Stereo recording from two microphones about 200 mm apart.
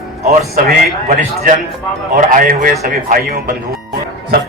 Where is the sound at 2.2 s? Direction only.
40° right (ahead or behind).